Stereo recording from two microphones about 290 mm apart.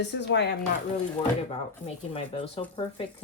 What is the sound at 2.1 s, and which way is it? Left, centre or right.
Speech, centre.